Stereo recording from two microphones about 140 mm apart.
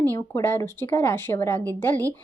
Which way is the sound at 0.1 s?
20° left (ahead or behind).